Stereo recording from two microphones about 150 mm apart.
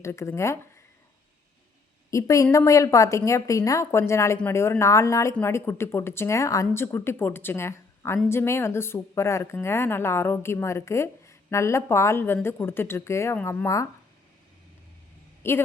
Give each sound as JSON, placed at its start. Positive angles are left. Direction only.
{"t": 0.0, "sound": "a woman's voice", "side_deg": 20}
{"t": 2.0, "sound": "a woman's voice", "side_deg": 20}
{"t": 15.4, "sound": "speech", "side_deg": 15}